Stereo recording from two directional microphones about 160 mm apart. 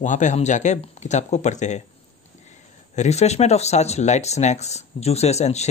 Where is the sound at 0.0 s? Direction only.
50° left (ahead or behind).